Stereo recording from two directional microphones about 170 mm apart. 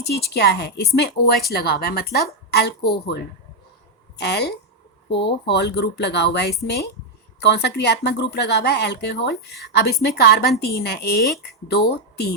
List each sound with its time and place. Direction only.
0.0 s a woman's voice: 75° left (ahead or behind)
4.2 s a woman's voice: 75° left (ahead or behind)
5.0 s a woman's voice: 90° left; by 12.3 s 70° left (ahead or behind)